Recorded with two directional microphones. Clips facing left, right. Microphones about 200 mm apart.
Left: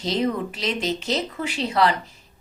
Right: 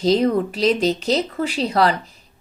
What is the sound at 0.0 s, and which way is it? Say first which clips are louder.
Speech: right 7 dB; 40° right (ahead or behind).